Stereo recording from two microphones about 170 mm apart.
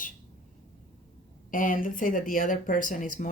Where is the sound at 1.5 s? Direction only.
55° left (ahead or behind).